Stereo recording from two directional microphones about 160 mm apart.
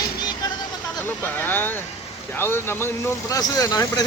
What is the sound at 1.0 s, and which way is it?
Speech, 10° left (ahead or behind).